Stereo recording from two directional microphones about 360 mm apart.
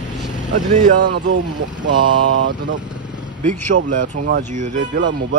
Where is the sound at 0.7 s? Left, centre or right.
Right.